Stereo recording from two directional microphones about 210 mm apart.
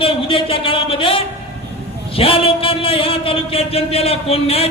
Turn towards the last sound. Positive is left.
turn(degrees=30)  # may be behind; listen again after turning